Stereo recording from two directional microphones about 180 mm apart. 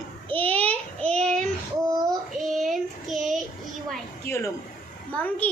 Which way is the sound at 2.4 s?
Centre (ahead or behind).